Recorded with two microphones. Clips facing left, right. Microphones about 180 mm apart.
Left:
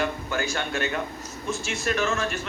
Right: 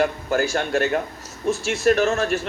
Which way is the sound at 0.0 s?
40° right (ahead or behind).